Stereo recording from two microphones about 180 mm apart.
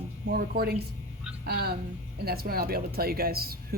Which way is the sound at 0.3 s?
55° right (ahead or behind).